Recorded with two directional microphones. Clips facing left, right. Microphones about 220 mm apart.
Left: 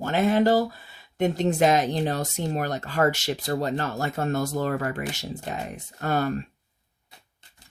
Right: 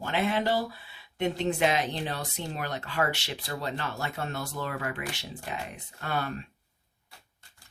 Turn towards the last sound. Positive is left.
turn(degrees=45)  # may be behind; listen again after turning